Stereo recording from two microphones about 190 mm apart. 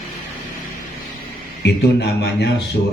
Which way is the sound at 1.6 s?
60° left (ahead or behind).